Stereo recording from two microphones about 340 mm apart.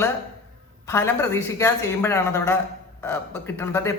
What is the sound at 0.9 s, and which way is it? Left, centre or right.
Speech, centre.